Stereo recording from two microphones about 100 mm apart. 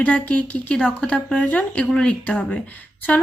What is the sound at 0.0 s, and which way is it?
Speech, 15° left (ahead or behind).